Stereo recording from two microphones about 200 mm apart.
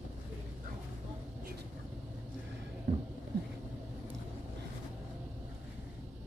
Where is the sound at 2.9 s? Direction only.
35° right (ahead or behind).